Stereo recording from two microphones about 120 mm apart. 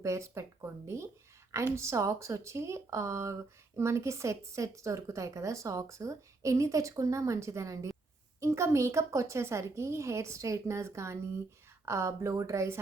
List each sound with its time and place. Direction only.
0.0 s a woman's voice: 25° right (ahead or behind)